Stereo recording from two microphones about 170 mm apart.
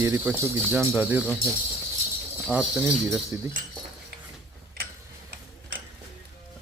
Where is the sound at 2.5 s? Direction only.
5° right (ahead or behind).